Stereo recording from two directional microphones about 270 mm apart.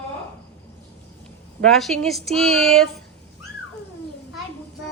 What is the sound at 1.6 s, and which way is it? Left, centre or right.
Speech, centre.